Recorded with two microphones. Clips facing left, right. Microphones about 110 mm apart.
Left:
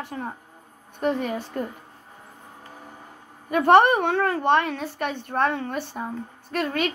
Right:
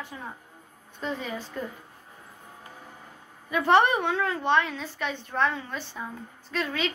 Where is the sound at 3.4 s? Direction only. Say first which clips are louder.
Left 5 dB; 50° left (ahead or behind).